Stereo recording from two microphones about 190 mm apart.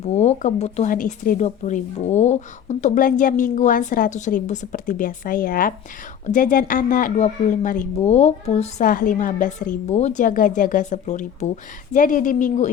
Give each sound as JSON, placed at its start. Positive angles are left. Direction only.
{"t": 0.0, "sound": "speech", "side_deg": 35}